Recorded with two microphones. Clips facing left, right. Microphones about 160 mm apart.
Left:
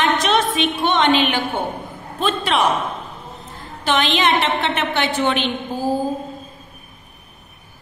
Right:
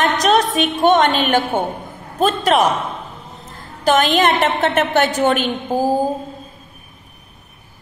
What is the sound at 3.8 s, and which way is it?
A woman's voice, 45° right (ahead or behind).